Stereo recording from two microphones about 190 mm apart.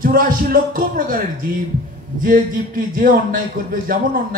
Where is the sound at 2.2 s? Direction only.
45° right (ahead or behind).